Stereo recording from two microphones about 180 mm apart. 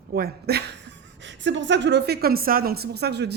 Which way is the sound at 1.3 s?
85° right.